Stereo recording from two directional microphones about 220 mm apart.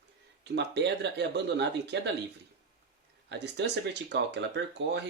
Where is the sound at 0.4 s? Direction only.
50° right (ahead or behind).